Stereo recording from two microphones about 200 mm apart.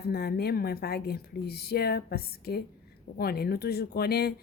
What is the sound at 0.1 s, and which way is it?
Speech, 50° left (ahead or behind).